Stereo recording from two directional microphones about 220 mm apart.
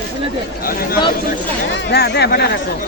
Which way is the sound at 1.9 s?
50° left (ahead or behind).